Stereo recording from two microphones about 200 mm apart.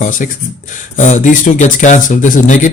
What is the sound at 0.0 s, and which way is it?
Speech, 40° left (ahead or behind).